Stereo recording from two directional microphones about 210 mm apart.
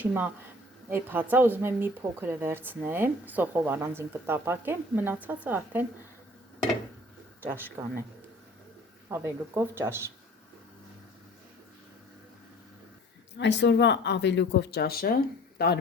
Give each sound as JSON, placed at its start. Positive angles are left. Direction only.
{"t": 0.0, "sound": "speech", "side_deg": -10}
{"t": 7.4, "sound": "speech", "side_deg": -10}
{"t": 9.0, "sound": "speech", "side_deg": -10}
{"t": 13.4, "sound": "speech", "side_deg": 55}